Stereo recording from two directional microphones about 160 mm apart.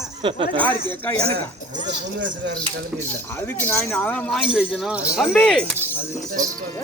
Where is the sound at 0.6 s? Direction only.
10° left (ahead or behind).